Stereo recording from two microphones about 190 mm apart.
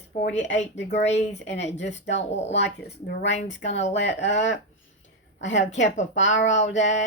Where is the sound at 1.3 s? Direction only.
65° left (ahead or behind).